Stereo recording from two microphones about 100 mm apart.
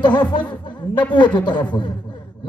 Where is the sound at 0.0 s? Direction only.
50° left (ahead or behind).